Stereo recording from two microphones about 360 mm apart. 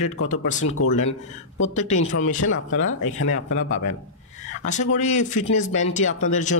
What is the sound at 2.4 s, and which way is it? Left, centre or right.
Speech, left.